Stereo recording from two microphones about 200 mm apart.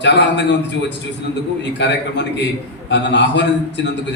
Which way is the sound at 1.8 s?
60° left (ahead or behind).